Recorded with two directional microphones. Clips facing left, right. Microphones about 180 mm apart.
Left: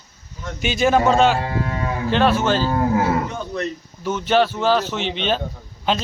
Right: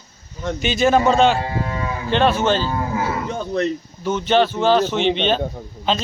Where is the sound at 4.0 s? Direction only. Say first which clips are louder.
Right 1 dB; 5° left (ahead or behind).